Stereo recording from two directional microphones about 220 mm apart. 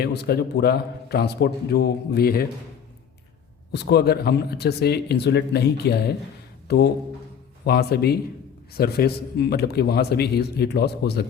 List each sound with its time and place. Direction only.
0.0 s a man's voice: 45° left (ahead or behind)
3.7 s a man's voice: 50° left (ahead or behind)